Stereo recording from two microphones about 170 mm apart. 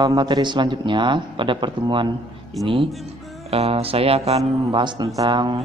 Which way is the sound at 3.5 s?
35° right (ahead or behind).